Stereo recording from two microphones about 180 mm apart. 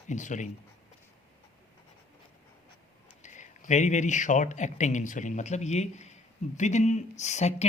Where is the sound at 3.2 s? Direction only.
40° left (ahead or behind).